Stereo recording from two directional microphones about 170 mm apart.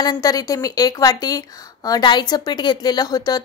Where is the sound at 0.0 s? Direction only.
25° left (ahead or behind).